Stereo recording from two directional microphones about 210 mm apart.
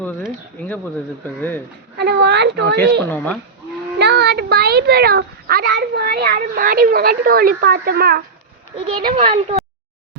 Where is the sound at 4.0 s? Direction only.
55° right (ahead or behind).